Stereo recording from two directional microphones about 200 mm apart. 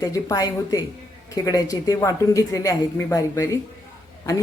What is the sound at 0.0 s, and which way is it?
Speech, 15° left (ahead or behind).